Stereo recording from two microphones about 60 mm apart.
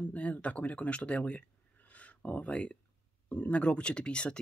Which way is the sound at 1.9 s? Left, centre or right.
Left.